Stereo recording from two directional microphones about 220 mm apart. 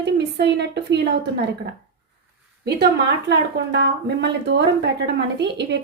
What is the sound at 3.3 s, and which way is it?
A woman's voice, 50° right (ahead or behind).